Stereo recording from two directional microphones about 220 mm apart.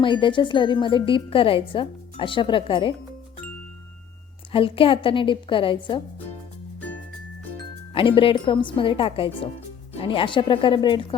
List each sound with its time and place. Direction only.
0.0 s a woman's voice: 20° left (ahead or behind)
4.5 s a woman's voice: 25° left (ahead or behind)
7.9 s a woman's voice: 25° left (ahead or behind)